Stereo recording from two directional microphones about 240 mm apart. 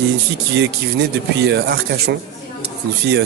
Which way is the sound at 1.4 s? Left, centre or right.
Right.